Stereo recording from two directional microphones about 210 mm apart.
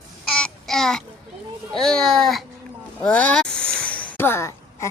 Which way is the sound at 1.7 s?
Centre (ahead or behind).